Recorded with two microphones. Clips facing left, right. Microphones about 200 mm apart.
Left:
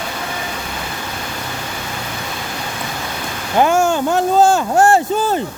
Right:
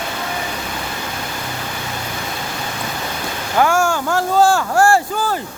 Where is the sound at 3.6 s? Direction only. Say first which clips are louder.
Left 2 dB; 20° left (ahead or behind).